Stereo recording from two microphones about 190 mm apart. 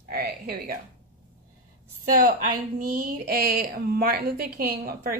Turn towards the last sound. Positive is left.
turn(degrees=-50)  # may be behind; listen again after turning